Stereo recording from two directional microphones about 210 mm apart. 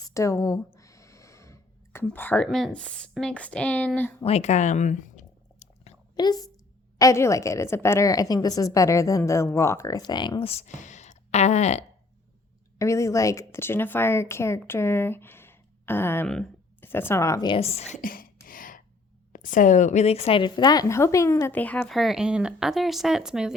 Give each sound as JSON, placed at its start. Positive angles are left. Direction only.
{"t": 0.1, "sound": "speech", "side_deg": 15}
{"t": 4.2, "sound": "chewing", "side_deg": 30}
{"t": 6.1, "sound": "a woman's voice", "side_deg": 20}
{"t": 12.8, "sound": "speech", "side_deg": 15}
{"t": 18.4, "sound": "a sound", "side_deg": 40}
{"t": 19.3, "sound": "speech", "side_deg": 40}